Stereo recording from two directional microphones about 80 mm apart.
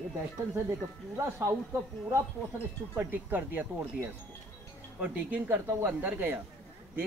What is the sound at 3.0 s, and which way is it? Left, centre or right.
Speech, right.